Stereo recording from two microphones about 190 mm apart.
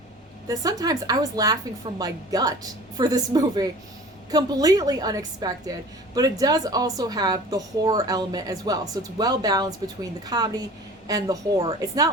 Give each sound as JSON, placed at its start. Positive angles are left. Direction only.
{"t": 0.4, "sound": "speech", "side_deg": -20}